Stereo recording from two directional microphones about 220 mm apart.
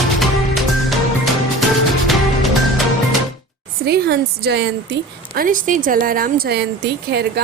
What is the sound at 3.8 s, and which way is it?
A woman's voice, 45° right (ahead or behind).